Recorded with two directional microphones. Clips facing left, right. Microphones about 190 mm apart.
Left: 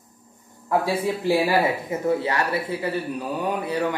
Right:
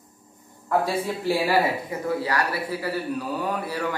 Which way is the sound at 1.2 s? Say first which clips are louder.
Left 1 dB; 20° left (ahead or behind).